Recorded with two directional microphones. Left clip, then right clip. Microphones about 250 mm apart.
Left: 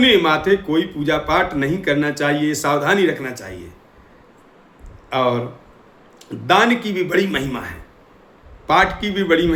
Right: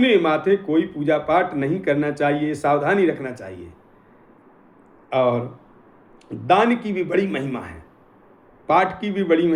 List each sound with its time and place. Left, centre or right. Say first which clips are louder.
0.0 s speech: left 3 dB; centre
5.0 s speech: left 1 dB; centre
6.5 s speech: left 2 dB; centre